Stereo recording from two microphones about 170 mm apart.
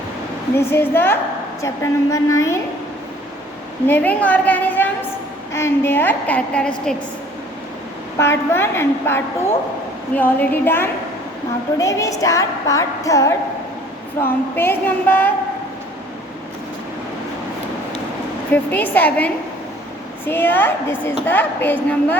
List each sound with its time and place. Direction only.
0.5 s a woman's voice: 15° left (ahead or behind)
3.8 s a woman's voice: 10° left (ahead or behind)
8.2 s a woman's voice: 15° left (ahead or behind)
11.8 s a sound: 20° left (ahead or behind)
14.2 s a woman's voice: 15° left (ahead or behind)
18.5 s a woman's voice: 10° left (ahead or behind)